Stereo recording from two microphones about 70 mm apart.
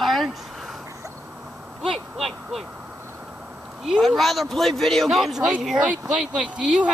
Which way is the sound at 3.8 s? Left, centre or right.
Centre.